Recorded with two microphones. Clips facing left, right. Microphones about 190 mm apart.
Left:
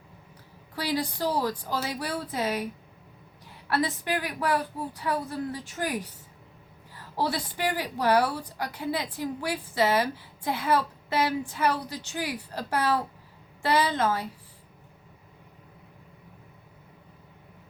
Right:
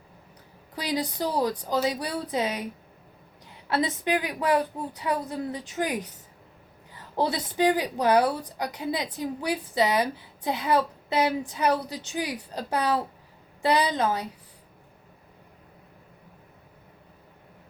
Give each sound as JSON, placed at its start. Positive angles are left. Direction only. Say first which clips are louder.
{"t": 0.8, "sound": "a woman's voice", "louder": "even", "side_deg": -20}
{"t": 3.7, "sound": "a woman's voice", "louder": "right 2 dB", "side_deg": -20}